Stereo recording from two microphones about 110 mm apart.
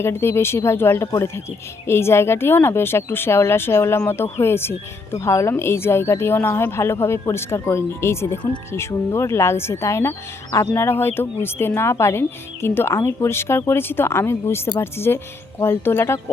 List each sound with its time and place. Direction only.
0.0 s speech: 25° left (ahead or behind)